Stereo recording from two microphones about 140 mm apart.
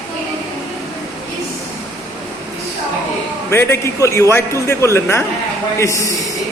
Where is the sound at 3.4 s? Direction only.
15° left (ahead or behind).